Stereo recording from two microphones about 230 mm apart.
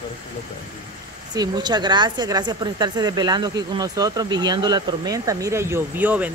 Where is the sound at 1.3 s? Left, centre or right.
Centre.